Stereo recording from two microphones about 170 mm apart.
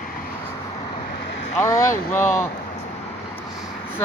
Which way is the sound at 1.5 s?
15° left (ahead or behind).